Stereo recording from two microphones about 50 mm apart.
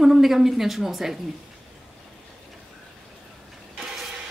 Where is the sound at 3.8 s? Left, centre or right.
Centre.